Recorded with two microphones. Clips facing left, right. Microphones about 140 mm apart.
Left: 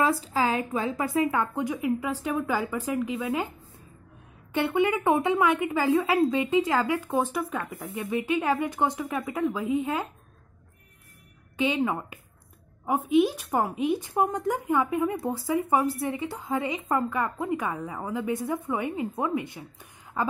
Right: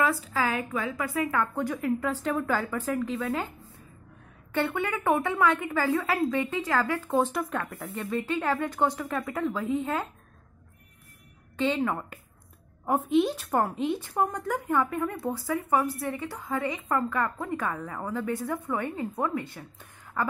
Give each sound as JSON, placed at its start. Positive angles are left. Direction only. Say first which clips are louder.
{"t": 0.0, "sound": "speech", "louder": "left 2 dB", "side_deg": 25}
{"t": 4.6, "sound": "speech", "louder": "left 4 dB", "side_deg": 20}
{"t": 11.5, "sound": "speech", "louder": "left 1 dB", "side_deg": 15}